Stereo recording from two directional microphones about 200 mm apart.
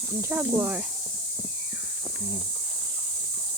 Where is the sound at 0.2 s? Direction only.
10° right (ahead or behind).